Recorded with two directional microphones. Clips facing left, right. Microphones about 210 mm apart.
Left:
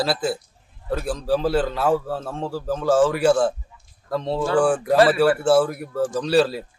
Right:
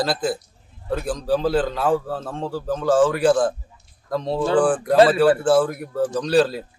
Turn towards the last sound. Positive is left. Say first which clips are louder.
# right 1 dB
turn(degrees=0)  # may be behind; listen again after turning